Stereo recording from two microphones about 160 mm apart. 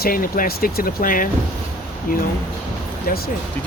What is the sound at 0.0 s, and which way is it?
Speech, 65° left (ahead or behind).